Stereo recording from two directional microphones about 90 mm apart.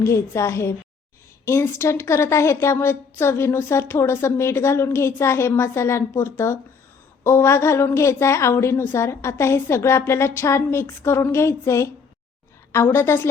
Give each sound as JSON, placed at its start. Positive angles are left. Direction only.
{"t": 0.0, "sound": "a woman's voice", "side_deg": 30}